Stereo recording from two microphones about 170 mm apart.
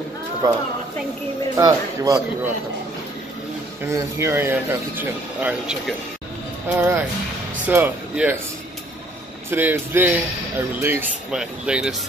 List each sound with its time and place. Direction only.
0.4 s speech: 20° right (ahead or behind)
3.8 s speech: 15° right (ahead or behind)
9.5 s speech: 10° right (ahead or behind)